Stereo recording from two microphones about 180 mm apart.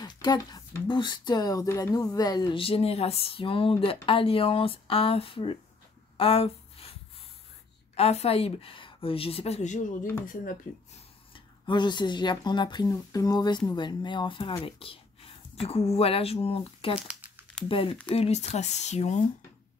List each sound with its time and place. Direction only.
0.0 s speech: 20° left (ahead or behind)
6.1 s a sound: 30° left (ahead or behind)
7.9 s speech: 35° left (ahead or behind)
11.3 s speech: 25° left (ahead or behind)
17.1 s crumpling: 10° right (ahead or behind)
17.6 s speech: 30° left (ahead or behind)